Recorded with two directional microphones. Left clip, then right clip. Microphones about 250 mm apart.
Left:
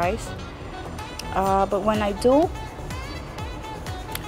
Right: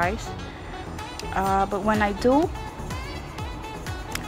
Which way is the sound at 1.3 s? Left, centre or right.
Centre.